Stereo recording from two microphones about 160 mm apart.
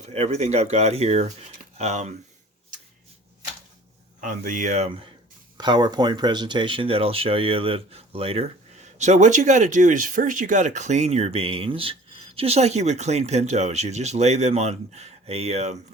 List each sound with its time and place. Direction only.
0.0 s speech: 45° right (ahead or behind)
4.2 s speech: 55° right (ahead or behind); by 5.0 s 40° right (ahead or behind)
5.5 s speech: 25° right (ahead or behind); by 15.8 s 45° right (ahead or behind)